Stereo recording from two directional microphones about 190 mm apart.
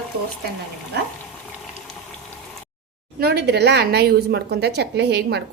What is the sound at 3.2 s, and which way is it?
A woman's voice, 55° right (ahead or behind).